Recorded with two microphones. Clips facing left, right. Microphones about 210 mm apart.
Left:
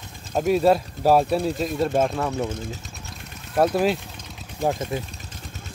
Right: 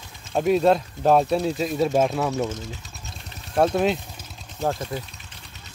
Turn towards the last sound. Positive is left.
turn(degrees=15)  # may be behind; listen again after turning